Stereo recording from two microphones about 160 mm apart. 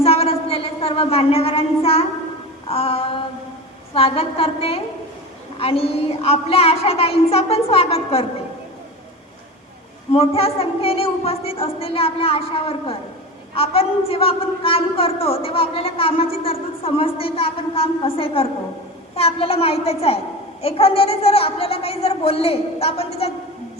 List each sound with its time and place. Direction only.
0.0 s a sound: 40° left (ahead or behind)
2.6 s child singing: 40° left (ahead or behind)
3.9 s a woman's voice: 35° left (ahead or behind)
10.1 s a woman's voice: 35° left (ahead or behind)